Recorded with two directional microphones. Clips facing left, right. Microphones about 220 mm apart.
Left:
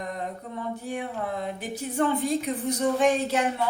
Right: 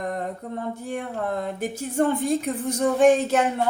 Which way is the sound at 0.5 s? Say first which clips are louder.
Right 1 dB; 50° right (ahead or behind).